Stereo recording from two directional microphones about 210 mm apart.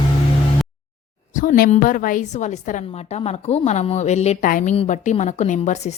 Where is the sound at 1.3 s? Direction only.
40° left (ahead or behind).